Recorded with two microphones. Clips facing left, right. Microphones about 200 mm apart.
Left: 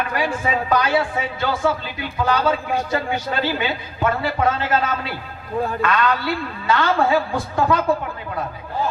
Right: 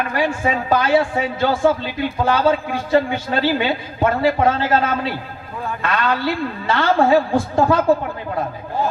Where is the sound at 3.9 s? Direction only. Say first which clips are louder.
Right 4 dB; 35° right (ahead or behind).